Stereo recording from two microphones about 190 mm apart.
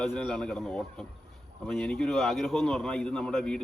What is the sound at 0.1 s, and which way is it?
A man's voice, 5° left (ahead or behind).